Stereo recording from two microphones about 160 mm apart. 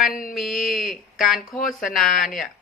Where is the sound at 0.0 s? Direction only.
60° left (ahead or behind).